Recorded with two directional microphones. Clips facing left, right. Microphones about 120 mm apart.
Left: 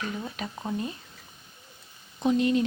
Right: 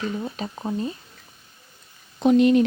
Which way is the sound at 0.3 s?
30° right (ahead or behind).